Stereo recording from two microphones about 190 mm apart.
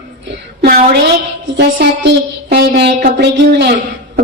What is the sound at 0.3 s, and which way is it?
A woman's voice, 60° right (ahead or behind).